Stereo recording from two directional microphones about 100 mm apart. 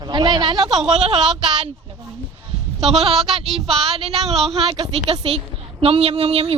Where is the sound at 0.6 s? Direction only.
5° right (ahead or behind).